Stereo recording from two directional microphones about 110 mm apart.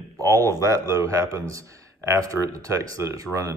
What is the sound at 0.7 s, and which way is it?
Speech, 30° right (ahead or behind).